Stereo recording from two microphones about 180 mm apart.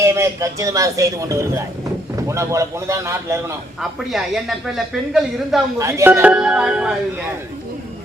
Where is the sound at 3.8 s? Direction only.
Centre (ahead or behind).